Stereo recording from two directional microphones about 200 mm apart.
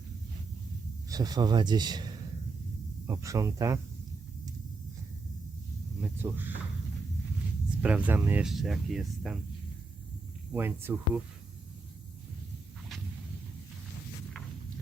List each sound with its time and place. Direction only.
1.1 s speech: 20° right (ahead or behind)
6.0 s speech: 10° right (ahead or behind)
7.8 s speech: 5° right (ahead or behind)
10.5 s speech: 10° right (ahead or behind)